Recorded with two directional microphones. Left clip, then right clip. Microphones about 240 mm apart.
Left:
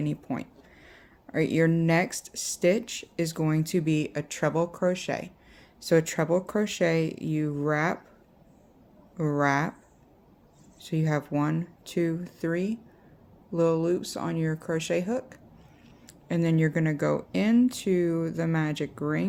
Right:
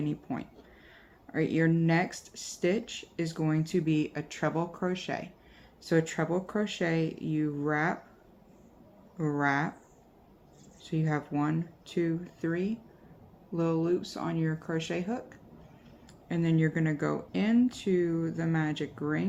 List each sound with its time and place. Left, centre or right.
0.0 s speech: left
9.1 s speech: left
10.8 s speech: left